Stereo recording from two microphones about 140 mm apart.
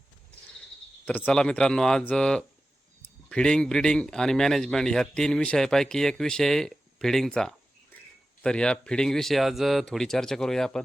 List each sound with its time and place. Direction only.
1.0 s a man's voice: 10° left (ahead or behind)